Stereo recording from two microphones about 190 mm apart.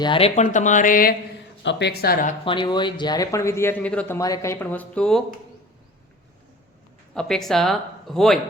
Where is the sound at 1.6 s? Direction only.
60° left (ahead or behind).